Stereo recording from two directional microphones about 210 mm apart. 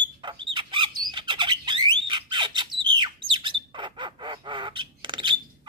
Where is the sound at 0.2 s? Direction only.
20° right (ahead or behind).